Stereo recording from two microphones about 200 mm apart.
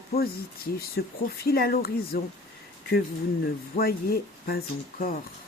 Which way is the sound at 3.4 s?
50° left (ahead or behind).